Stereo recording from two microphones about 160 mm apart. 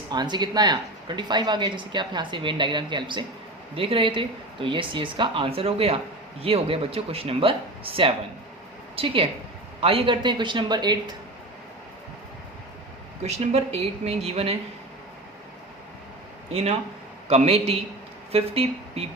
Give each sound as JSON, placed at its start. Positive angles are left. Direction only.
{"t": 0.1, "sound": "speech", "side_deg": -25}
{"t": 9.0, "sound": "speech", "side_deg": -35}
{"t": 13.2, "sound": "speech", "side_deg": -40}
{"t": 16.5, "sound": "speech", "side_deg": -40}